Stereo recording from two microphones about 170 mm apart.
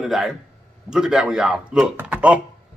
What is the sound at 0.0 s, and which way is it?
Speech, 5° right (ahead or behind).